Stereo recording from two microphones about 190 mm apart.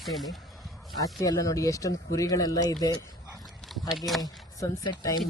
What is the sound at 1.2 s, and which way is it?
Speech, 20° left (ahead or behind).